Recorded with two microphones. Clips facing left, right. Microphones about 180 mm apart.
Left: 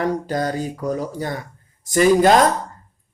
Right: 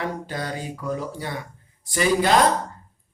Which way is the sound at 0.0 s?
40° left (ahead or behind).